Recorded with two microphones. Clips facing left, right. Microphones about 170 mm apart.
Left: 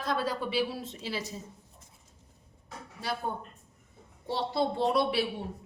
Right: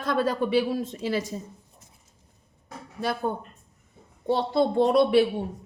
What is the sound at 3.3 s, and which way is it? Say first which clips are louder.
A woman's voice: right 6 dB; 60° right (ahead or behind).